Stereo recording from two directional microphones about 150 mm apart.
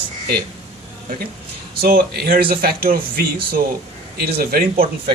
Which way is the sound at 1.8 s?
85° right.